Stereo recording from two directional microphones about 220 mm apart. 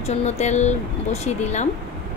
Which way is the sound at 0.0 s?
30° left (ahead or behind).